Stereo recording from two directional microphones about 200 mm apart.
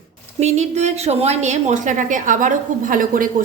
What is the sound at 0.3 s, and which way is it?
A woman's voice, 35° right (ahead or behind).